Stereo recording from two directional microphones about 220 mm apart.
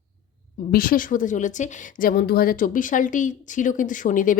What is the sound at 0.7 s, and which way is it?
A woman's voice, 40° left (ahead or behind).